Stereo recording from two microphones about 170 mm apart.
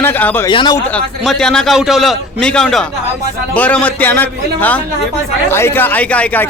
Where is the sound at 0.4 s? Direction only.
25° left (ahead or behind).